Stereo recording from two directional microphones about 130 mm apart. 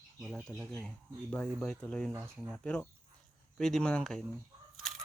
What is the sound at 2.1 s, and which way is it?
Speech, 25° right (ahead or behind).